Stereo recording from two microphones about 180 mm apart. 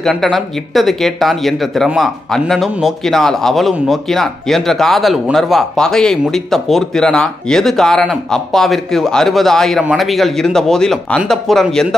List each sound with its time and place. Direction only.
0.0 s speech: centre (ahead or behind)